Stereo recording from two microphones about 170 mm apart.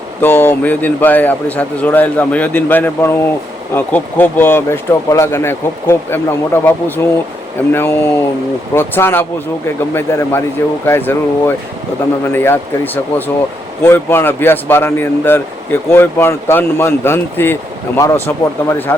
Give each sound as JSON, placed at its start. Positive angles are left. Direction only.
{"t": 0.2, "sound": "speech", "side_deg": 15}